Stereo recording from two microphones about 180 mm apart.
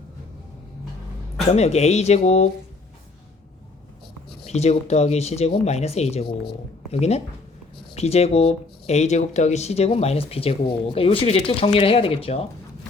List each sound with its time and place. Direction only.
1.5 s speech: 35° left (ahead or behind)
4.4 s speech: 35° left (ahead or behind)